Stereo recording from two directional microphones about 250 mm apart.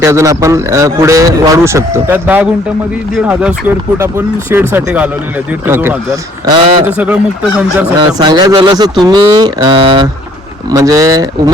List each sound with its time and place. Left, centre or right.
0.0 s a man's voice: centre
4.7 s a man's voice: centre
6.9 s speech: centre
7.9 s a man's voice: centre